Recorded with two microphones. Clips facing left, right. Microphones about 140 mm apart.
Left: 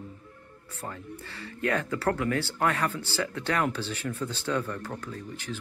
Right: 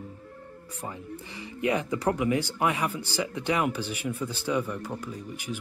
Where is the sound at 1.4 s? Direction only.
15° right (ahead or behind).